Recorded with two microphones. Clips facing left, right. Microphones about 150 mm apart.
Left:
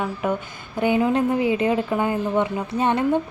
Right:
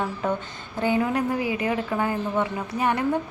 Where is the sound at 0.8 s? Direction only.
20° left (ahead or behind).